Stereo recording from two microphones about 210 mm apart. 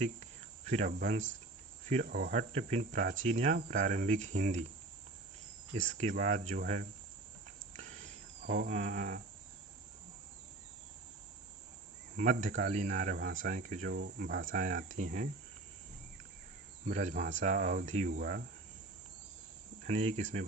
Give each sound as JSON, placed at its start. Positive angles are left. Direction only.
{"t": 0.7, "sound": "speech", "side_deg": -40}
{"t": 1.9, "sound": "cricket", "side_deg": -40}
{"t": 2.5, "sound": "speech", "side_deg": -30}
{"t": 6.0, "sound": "speech", "side_deg": -35}
{"t": 7.8, "sound": "a sound", "side_deg": -35}
{"t": 12.1, "sound": "speech", "side_deg": -35}
{"t": 16.8, "sound": "speech", "side_deg": -35}
{"t": 18.1, "sound": "cricket", "side_deg": -45}
{"t": 19.8, "sound": "speech", "side_deg": -30}